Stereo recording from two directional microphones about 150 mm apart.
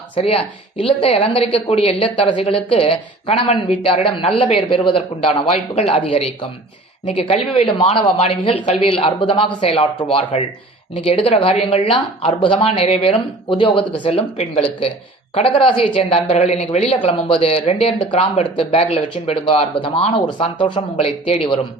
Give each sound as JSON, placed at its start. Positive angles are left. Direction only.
{"t": 0.2, "sound": "a woman's voice", "side_deg": 40}